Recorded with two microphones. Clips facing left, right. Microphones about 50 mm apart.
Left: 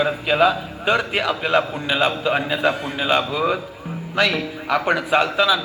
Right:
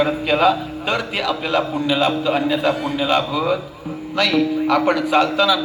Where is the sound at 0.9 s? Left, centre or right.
Left.